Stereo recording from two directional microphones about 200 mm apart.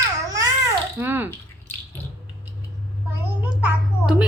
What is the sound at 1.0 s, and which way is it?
Speech, 10° right (ahead or behind).